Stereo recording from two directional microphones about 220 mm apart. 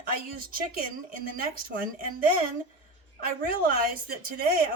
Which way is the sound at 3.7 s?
40° right (ahead or behind).